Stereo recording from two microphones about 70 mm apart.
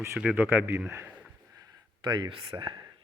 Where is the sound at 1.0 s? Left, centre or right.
Right.